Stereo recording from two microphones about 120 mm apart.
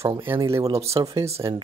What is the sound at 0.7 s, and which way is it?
Speech, 60° right (ahead or behind).